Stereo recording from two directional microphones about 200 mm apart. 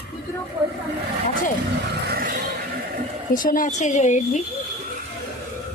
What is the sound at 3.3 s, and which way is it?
A woman's voice, 45° left (ahead or behind).